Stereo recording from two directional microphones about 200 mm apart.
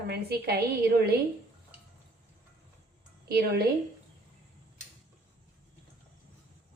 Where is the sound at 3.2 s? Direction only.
50° right (ahead or behind).